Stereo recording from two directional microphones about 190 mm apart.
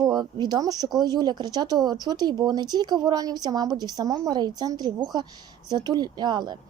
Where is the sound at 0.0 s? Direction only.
20° right (ahead or behind).